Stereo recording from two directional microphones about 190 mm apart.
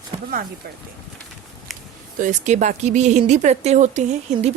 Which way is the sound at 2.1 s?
40° right (ahead or behind).